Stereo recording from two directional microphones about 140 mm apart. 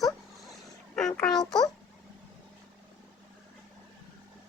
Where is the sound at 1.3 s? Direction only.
30° left (ahead or behind).